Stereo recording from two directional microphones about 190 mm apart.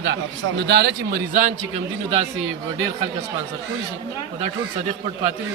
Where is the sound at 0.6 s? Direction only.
60° right (ahead or behind).